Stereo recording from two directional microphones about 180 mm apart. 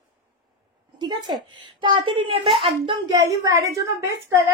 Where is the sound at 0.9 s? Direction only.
25° right (ahead or behind).